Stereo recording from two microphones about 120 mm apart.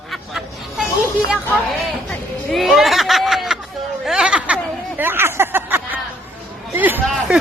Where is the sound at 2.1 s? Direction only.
Centre (ahead or behind).